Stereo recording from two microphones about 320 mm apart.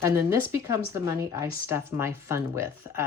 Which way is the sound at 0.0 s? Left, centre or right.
Centre.